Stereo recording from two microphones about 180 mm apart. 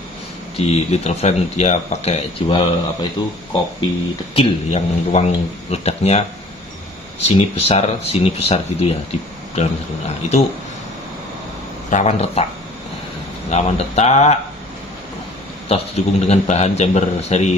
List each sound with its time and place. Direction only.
0.6 s speech: 35° left (ahead or behind)
4.4 s speech: 35° left (ahead or behind)
11.9 s speech: 40° left (ahead or behind)
13.5 s speech: 40° left (ahead or behind)
15.7 s speech: 35° left (ahead or behind)